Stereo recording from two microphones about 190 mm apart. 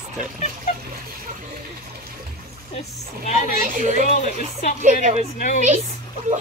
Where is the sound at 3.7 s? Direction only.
40° right (ahead or behind).